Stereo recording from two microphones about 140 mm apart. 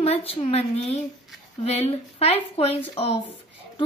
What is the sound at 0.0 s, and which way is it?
A woman's voice, 45° left (ahead or behind).